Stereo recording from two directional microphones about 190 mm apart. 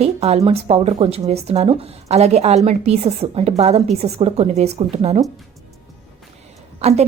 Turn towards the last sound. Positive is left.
turn(degrees=-35)  # may be behind; listen again after turning